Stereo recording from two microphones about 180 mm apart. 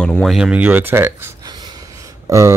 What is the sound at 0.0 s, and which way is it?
Speech, 5° left (ahead or behind).